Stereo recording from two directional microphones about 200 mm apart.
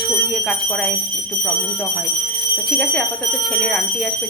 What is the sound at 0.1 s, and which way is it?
Speech, 5° left (ahead or behind).